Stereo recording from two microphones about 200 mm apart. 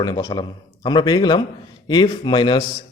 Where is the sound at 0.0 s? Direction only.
20° left (ahead or behind).